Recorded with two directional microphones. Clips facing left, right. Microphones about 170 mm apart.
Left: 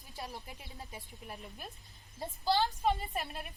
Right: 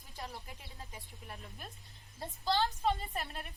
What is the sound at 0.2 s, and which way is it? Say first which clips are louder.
A woman's voice: left 1 dB; 15° left (ahead or behind).